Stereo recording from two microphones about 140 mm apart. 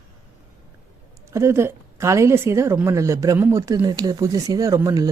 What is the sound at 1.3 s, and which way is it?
Speech, 20° right (ahead or behind).